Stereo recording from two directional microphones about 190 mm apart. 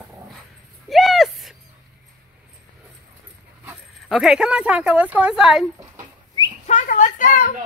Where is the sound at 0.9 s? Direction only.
Centre (ahead or behind).